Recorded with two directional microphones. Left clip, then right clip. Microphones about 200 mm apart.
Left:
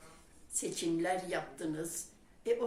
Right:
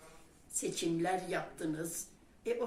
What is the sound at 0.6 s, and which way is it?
Speech, 20° left (ahead or behind).